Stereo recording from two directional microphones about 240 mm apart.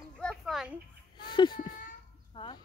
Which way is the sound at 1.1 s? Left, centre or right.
Centre.